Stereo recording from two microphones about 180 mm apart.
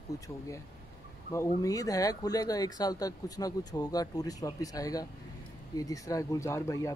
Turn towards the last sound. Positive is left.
turn(degrees=15)  # may be behind; listen again after turning